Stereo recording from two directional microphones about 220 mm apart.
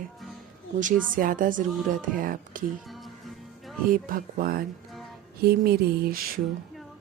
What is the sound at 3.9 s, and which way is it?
A woman's voice, 40° right (ahead or behind).